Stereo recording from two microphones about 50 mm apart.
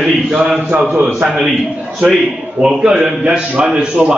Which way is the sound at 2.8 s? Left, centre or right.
Centre.